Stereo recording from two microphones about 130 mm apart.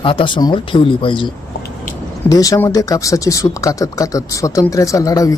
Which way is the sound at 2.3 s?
25° left (ahead or behind).